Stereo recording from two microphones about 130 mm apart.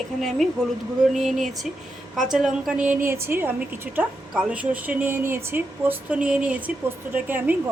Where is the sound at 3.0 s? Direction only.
20° right (ahead or behind).